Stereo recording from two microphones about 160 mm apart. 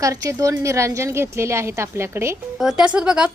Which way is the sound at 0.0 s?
20° right (ahead or behind).